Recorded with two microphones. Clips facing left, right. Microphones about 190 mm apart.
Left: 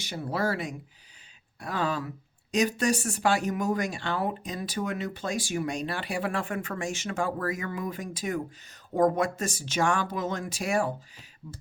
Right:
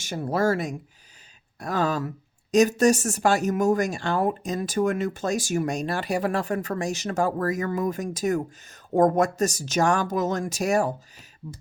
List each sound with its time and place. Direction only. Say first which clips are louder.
0.0 s speech: right 6 dB; 45° right (ahead or behind)